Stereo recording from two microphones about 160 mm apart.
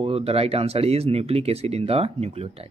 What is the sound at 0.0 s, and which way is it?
Speech, 40° right (ahead or behind).